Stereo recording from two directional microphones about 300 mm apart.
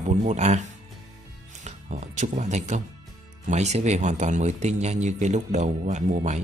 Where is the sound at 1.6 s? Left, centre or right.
Right.